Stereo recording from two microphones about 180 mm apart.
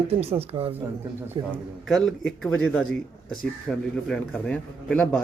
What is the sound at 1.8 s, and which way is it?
A man's voice, centre (ahead or behind).